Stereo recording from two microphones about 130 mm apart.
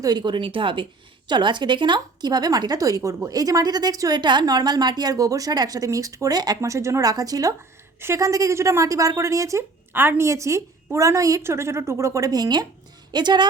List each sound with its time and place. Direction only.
0.0 s a woman's voice: 35° right (ahead or behind)